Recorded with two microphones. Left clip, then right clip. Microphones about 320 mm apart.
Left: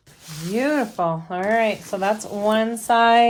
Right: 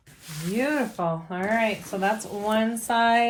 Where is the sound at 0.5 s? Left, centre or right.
Left.